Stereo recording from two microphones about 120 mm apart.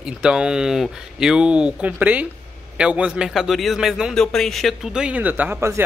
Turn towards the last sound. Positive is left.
turn(degrees=-20)  # may be behind; listen again after turning